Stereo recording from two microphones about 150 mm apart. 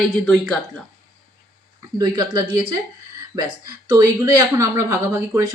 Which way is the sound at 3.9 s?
25° right (ahead or behind).